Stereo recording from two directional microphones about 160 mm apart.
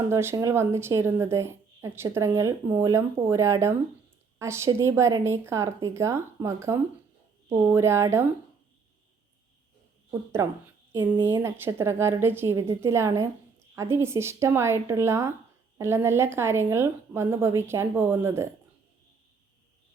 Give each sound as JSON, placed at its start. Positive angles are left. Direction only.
{"t": 0.1, "sound": "a woman's voice", "side_deg": -15}
{"t": 10.1, "sound": "a woman's voice", "side_deg": -15}